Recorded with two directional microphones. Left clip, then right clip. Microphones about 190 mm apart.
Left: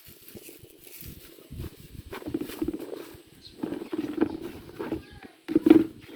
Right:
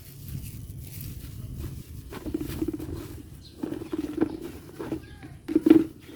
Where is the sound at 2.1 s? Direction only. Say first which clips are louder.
Even; 45° right (ahead or behind).